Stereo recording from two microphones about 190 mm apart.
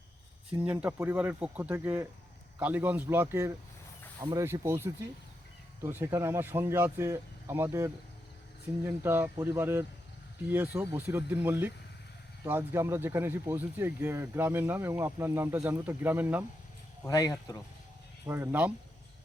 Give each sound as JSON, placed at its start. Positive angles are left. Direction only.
{"t": 0.7, "sound": "speech", "side_deg": -10}
{"t": 17.0, "sound": "speech", "side_deg": 20}
{"t": 18.3, "sound": "speech", "side_deg": -10}